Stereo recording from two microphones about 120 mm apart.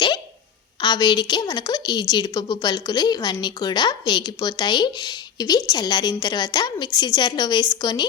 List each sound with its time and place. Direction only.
0.8 s a woman's voice: 35° left (ahead or behind)